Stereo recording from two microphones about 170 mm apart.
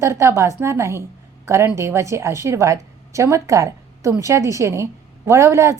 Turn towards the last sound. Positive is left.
turn(degrees=-15)  # may be behind; listen again after turning